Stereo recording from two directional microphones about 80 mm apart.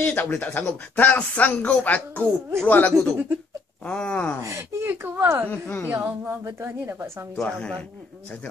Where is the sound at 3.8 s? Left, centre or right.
Centre.